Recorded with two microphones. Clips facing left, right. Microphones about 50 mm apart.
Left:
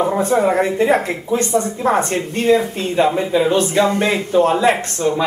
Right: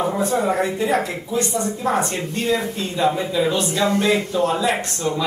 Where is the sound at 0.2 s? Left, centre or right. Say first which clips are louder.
Left 5 dB; left.